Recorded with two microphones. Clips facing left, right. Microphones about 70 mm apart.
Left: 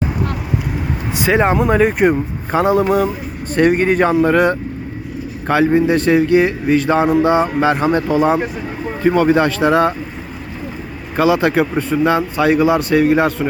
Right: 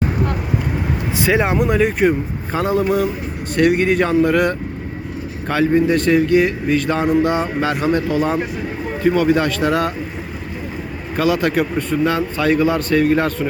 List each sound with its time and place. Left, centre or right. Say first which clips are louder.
1.1 s speech: left 3 dB; centre; by 2.8 s left
3.6 s speech: left 2 dB; left
11.2 s speech: left 3 dB; left